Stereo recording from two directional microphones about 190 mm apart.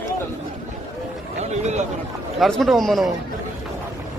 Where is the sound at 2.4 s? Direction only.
Centre (ahead or behind).